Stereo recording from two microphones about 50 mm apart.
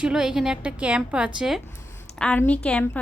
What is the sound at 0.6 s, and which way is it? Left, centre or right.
Speech, right.